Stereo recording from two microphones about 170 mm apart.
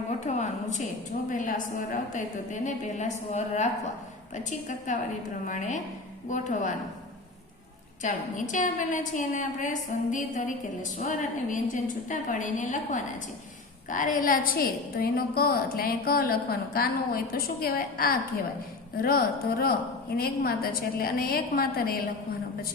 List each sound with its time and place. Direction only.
0.3 s a woman's voice: 45° left (ahead or behind)
4.9 s a woman's voice: 45° left (ahead or behind)
8.0 s a woman's voice: 50° left (ahead or behind)